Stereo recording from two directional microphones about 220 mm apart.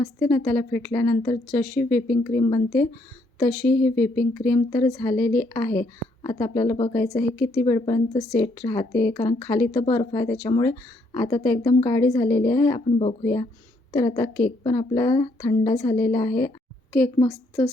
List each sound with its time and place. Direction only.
0.0 s a woman's voice: 15° left (ahead or behind)